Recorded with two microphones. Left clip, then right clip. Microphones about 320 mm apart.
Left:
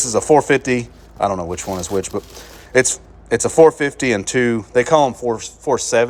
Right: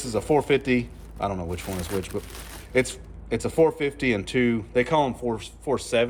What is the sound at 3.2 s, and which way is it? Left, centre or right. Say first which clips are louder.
Speech: left 10 dB; centre.